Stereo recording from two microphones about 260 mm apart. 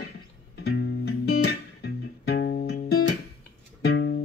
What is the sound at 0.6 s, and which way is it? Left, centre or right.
Music, left.